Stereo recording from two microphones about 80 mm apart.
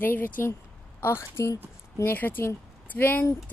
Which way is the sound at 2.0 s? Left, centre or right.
Left.